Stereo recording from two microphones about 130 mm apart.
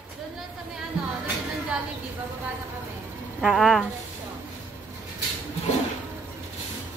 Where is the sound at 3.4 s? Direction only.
Centre (ahead or behind).